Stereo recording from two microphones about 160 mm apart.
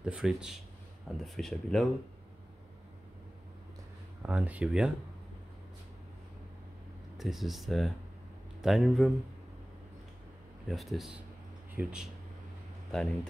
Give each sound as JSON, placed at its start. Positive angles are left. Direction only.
{"t": 0.0, "sound": "speech", "side_deg": -5}
{"t": 4.2, "sound": "speech", "side_deg": -10}
{"t": 7.2, "sound": "speech", "side_deg": 0}
{"t": 10.7, "sound": "speech", "side_deg": 0}